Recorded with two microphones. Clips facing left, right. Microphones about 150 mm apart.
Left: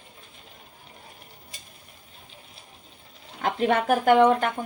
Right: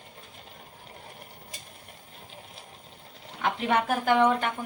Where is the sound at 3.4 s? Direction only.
45° left (ahead or behind).